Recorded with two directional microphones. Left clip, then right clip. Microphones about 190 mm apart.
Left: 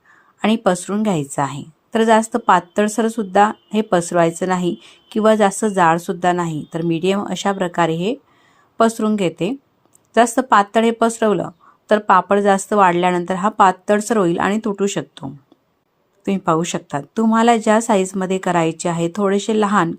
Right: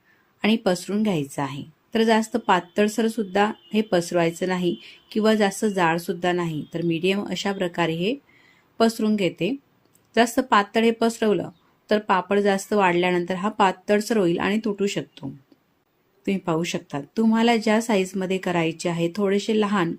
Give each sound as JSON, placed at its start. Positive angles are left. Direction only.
{"t": 0.4, "sound": "a woman's voice", "side_deg": 15}